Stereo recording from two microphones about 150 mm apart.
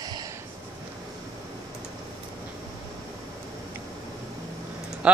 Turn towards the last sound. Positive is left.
turn(degrees=-5)  # may be behind; listen again after turning